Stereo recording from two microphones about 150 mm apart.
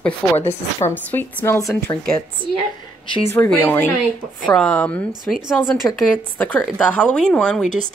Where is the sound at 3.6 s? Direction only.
15° left (ahead or behind).